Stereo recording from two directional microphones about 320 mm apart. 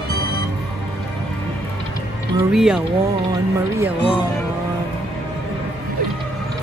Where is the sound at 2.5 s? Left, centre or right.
Centre.